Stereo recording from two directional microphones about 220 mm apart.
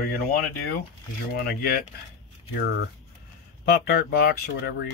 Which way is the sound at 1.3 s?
45° left (ahead or behind).